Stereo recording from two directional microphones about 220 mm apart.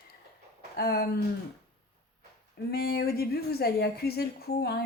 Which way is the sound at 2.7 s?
45° left (ahead or behind).